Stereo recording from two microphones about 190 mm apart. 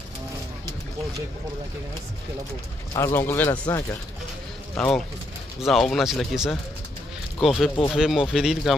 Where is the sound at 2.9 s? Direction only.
15° left (ahead or behind).